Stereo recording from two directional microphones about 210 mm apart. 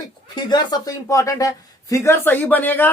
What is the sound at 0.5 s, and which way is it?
Speech, 15° left (ahead or behind).